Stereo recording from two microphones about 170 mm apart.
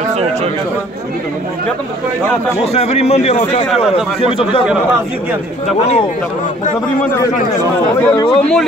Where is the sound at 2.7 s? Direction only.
35° left (ahead or behind).